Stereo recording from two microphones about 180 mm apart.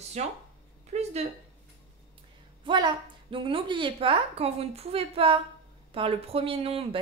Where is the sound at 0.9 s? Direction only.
40° right (ahead or behind).